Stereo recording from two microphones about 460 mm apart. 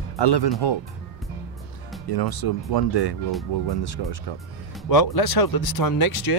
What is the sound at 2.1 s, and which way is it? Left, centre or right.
A man's voice, left.